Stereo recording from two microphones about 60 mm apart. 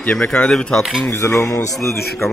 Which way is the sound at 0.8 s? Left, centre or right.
Centre.